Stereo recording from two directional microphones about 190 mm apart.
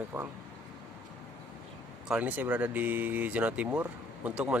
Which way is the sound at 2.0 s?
5° right (ahead or behind).